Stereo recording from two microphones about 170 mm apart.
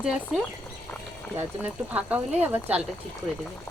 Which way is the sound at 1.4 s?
10° right (ahead or behind).